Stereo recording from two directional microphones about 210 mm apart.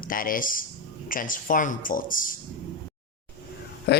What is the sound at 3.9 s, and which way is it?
Speech, 50° left (ahead or behind).